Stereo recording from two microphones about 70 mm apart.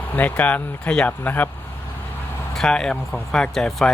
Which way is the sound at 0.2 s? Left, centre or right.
Left.